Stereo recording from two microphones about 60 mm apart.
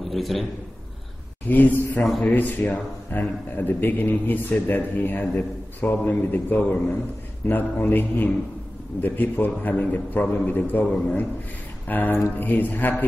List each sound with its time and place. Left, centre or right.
0.1 s a man's voice: centre
1.5 s a man's voice: left
11.9 s a man's voice: left